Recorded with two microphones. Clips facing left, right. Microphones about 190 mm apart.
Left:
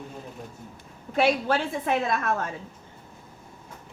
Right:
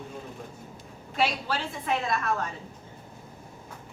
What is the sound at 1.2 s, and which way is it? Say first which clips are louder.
A woman's voice: left 6 dB; 55° left (ahead or behind).